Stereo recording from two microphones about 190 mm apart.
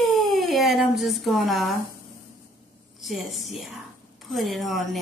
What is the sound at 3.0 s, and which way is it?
A woman's voice, centre (ahead or behind).